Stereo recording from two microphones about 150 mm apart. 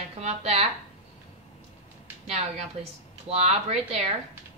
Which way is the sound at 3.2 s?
45° right (ahead or behind).